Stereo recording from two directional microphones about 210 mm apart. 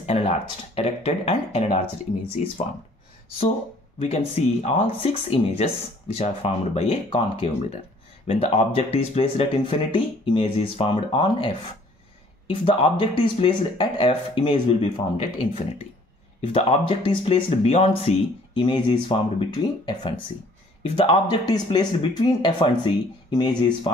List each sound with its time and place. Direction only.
0.0 s speech: 30° left (ahead or behind)
4.0 s speech: 30° left (ahead or behind)
12.4 s speech: 25° left (ahead or behind)